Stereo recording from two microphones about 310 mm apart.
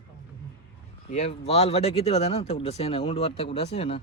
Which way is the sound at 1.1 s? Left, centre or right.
Left.